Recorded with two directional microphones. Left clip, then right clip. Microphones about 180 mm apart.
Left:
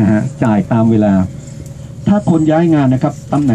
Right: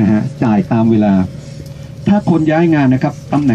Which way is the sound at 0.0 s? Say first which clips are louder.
Left 1 dB; 15° left (ahead or behind).